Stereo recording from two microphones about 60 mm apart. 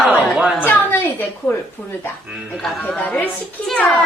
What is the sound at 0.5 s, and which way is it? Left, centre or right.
Speech, left.